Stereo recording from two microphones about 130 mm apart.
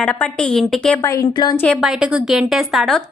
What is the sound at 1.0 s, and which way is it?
Speech, 25° left (ahead or behind).